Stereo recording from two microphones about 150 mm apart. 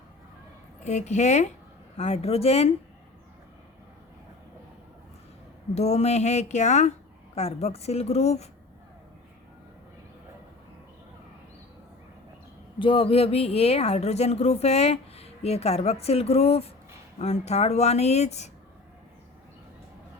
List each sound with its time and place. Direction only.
0.9 s speech: 50° left (ahead or behind)
5.7 s speech: 45° left (ahead or behind)
12.8 s speech: 35° left (ahead or behind)